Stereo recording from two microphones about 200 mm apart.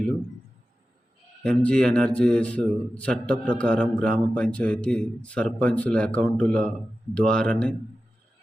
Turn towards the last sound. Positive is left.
turn(degrees=5)  # may be behind; listen again after turning